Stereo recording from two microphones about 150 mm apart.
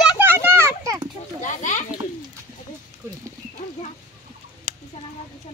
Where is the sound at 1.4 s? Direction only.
55° left (ahead or behind).